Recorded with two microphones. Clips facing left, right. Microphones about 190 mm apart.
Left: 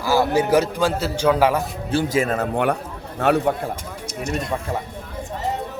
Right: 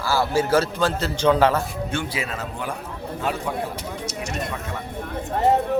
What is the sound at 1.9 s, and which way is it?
A man's voice, 40° left (ahead or behind).